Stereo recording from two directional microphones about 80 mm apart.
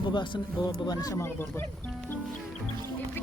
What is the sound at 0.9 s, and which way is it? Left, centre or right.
Speech, left.